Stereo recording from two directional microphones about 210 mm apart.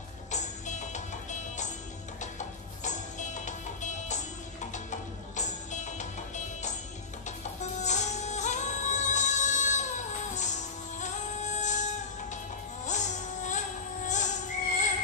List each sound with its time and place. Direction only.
0.3 s music: 35° left (ahead or behind)
7.8 s music: 35° left (ahead or behind)